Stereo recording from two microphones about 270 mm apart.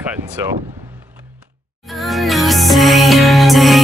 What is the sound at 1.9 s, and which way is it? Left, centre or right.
Music, centre.